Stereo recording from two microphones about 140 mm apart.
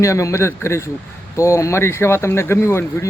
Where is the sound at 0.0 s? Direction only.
20° left (ahead or behind).